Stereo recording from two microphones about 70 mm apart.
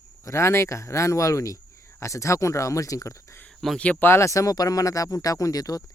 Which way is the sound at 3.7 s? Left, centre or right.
Centre.